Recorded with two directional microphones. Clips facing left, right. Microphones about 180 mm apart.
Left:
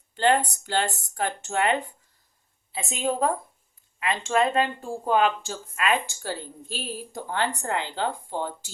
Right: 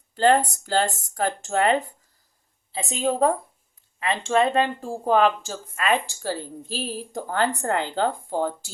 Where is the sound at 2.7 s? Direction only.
30° right (ahead or behind).